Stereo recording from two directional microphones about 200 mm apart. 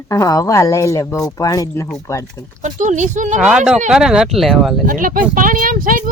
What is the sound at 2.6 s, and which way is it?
Speech, 40° right (ahead or behind).